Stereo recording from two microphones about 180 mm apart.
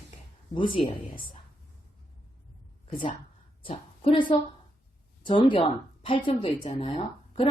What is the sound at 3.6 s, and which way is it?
A woman's voice, 30° left (ahead or behind).